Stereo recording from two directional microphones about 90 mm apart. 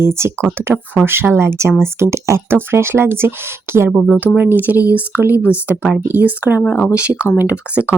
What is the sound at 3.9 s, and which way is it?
Speech, 10° right (ahead or behind).